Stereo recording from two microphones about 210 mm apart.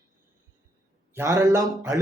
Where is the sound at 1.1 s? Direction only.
15° right (ahead or behind).